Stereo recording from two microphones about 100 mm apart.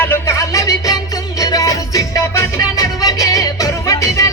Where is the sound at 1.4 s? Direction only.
35° left (ahead or behind).